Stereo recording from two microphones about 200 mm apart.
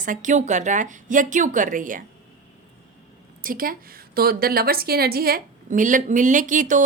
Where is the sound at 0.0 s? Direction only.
40° right (ahead or behind).